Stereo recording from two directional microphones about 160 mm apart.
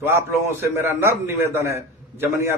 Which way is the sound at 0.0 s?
15° right (ahead or behind).